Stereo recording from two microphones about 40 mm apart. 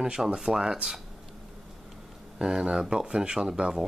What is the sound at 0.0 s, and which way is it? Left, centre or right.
Speech, centre.